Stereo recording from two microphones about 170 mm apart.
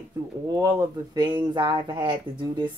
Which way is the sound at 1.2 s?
25° right (ahead or behind).